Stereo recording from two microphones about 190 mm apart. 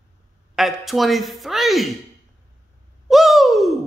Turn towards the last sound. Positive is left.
turn(degrees=0)  # may be behind; listen again after turning